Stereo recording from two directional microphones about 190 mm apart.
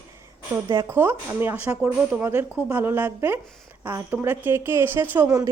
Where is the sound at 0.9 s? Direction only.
10° right (ahead or behind).